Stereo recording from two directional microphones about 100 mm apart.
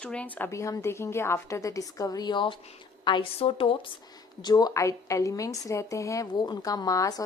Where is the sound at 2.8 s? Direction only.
50° left (ahead or behind).